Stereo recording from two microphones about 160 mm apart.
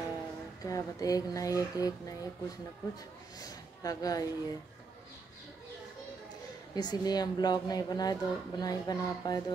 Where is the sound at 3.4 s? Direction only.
25° left (ahead or behind).